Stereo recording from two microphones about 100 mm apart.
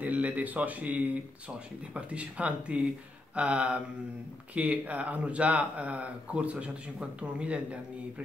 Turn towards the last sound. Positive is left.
turn(degrees=-10)  # may be behind; listen again after turning